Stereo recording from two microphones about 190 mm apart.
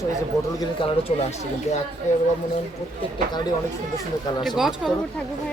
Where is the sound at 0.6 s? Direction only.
30° left (ahead or behind).